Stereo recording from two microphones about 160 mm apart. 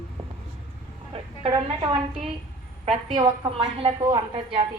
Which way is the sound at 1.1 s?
35° right (ahead or behind).